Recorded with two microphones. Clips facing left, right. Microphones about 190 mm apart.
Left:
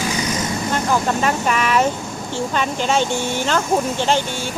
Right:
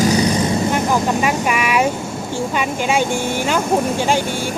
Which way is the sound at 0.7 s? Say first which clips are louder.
Right 2 dB; 10° right (ahead or behind).